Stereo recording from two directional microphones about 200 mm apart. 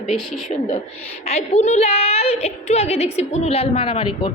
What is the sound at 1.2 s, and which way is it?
A woman's voice, 35° left (ahead or behind).